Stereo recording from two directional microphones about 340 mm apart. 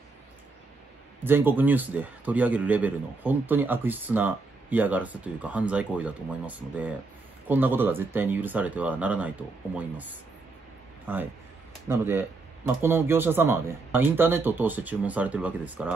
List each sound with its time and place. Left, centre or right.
1.2 s a man's voice: centre
11.1 s a man's voice: centre